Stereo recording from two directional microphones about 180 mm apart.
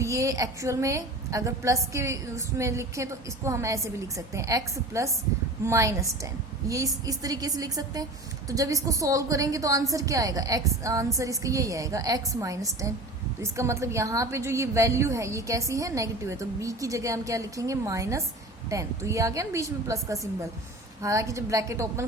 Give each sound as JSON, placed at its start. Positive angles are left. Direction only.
{"t": 0.0, "sound": "a woman's voice", "side_deg": -15}